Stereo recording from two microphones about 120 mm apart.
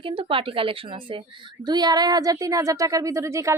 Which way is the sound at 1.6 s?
35° right (ahead or behind).